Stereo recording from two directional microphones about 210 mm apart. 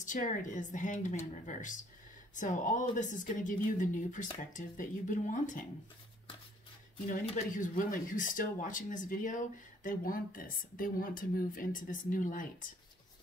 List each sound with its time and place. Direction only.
0.0 s speech: 35° left (ahead or behind)
7.5 s speech: 40° left (ahead or behind)